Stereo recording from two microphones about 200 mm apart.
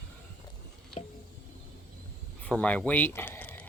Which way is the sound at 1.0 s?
30° left (ahead or behind).